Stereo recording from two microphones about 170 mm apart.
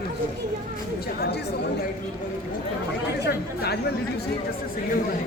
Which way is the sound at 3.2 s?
75° left (ahead or behind).